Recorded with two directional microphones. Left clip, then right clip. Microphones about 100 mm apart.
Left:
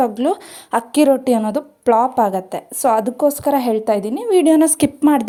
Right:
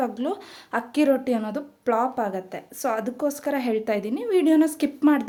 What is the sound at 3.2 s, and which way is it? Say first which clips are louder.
A woman's voice: left 10 dB; 50° left (ahead or behind).